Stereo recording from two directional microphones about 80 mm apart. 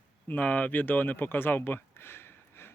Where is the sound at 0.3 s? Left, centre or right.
Left.